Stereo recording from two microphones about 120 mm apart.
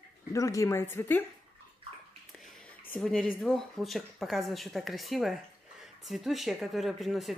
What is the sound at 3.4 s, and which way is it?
Speech, centre (ahead or behind).